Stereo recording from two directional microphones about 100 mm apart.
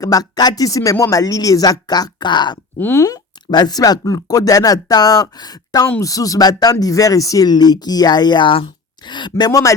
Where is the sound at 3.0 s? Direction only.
45° left (ahead or behind).